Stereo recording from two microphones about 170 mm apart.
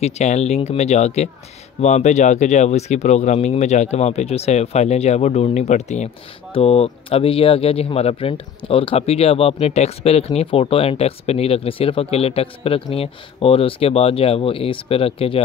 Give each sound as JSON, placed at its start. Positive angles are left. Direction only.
{"t": 0.0, "sound": "speech", "side_deg": 40}